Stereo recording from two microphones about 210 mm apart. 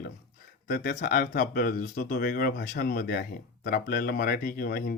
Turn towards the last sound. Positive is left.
turn(degrees=45)  # may be behind; listen again after turning